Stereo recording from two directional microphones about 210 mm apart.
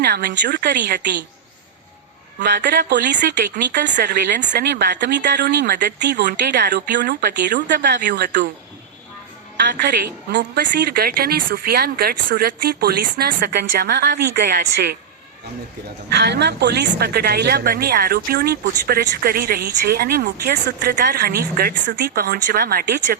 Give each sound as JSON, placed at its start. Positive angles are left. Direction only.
{"t": 0.0, "sound": "speech", "side_deg": -50}
{"t": 2.6, "sound": "speech", "side_deg": -55}
{"t": 3.2, "sound": "a woman's voice", "side_deg": -40}
{"t": 3.6, "sound": "speech", "side_deg": -55}
{"t": 9.7, "sound": "a woman's voice", "side_deg": -40}
{"t": 10.3, "sound": "speech", "side_deg": -50}
{"t": 16.1, "sound": "speech", "side_deg": -55}